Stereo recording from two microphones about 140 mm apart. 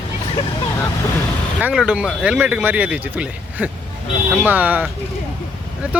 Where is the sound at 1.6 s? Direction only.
10° right (ahead or behind).